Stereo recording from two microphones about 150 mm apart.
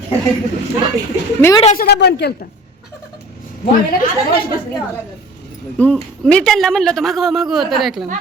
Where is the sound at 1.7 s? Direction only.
90° left.